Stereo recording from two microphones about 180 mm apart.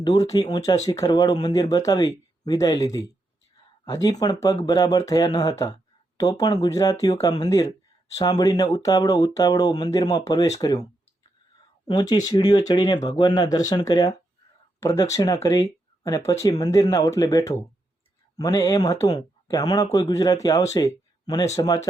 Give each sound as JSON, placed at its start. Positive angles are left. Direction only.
{"t": 0.0, "sound": "speech", "side_deg": 20}
{"t": 11.9, "sound": "speech", "side_deg": 20}